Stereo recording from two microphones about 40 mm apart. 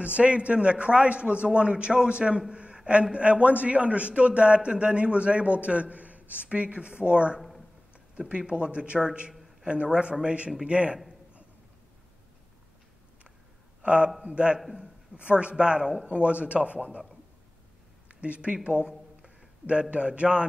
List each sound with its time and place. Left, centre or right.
0.0 s a man's voice: right
9.3 s a sound: centre
9.7 s a man's voice: right
13.8 s a man's voice: right
18.2 s speech: right
19.6 s a man's voice: right